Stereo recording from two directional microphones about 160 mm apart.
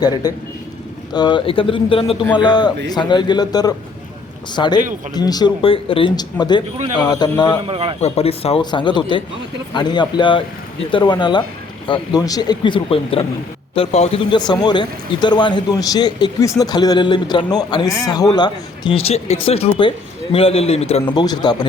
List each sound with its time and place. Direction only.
0.0 s speech: 25° left (ahead or behind)
7.7 s a man's voice: 35° right (ahead or behind)
8.0 s speech: 40° left (ahead or behind)
14.3 s speech: 25° left (ahead or behind)
21.1 s speech: 25° left (ahead or behind)